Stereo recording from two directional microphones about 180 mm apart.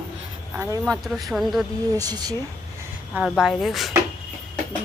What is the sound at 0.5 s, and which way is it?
Speech, 15° right (ahead or behind).